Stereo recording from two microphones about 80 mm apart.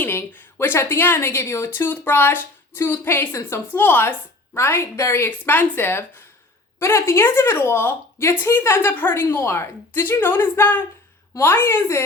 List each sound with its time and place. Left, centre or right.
0.0 s a woman's voice: left
4.5 s a woman's voice: left